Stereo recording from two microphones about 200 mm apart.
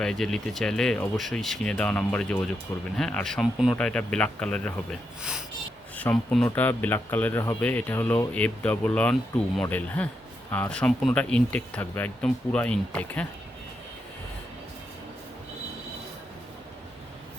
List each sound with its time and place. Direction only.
0.0 s speech: centre (ahead or behind)
6.0 s speech: 5° left (ahead or behind)